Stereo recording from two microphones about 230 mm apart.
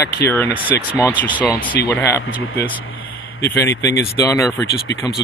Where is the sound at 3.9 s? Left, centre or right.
Left.